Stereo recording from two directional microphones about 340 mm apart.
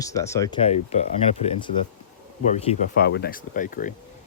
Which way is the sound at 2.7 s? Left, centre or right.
Left.